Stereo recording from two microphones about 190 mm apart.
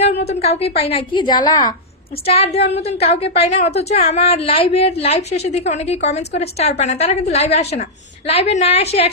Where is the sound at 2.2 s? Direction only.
30° left (ahead or behind).